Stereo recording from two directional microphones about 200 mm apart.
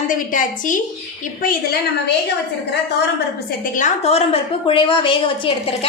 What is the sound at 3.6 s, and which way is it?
A woman's voice, 40° left (ahead or behind).